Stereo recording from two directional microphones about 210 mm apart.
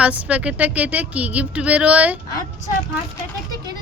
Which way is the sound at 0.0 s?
5° right (ahead or behind).